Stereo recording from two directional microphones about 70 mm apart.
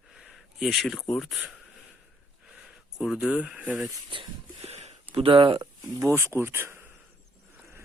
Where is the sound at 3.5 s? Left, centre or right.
Right.